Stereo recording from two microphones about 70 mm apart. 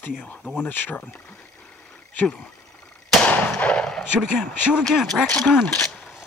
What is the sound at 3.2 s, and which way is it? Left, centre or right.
Gunshot, left.